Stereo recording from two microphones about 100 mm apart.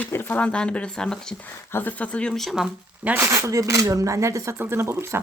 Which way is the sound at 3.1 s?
30° right (ahead or behind).